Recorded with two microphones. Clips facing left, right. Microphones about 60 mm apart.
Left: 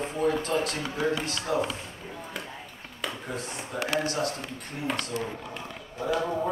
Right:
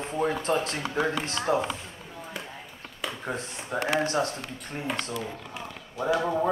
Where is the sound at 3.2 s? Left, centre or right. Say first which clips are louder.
Right 1 dB; right.